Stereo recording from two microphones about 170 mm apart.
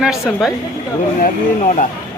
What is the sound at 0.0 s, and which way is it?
Speech, 5° right (ahead or behind).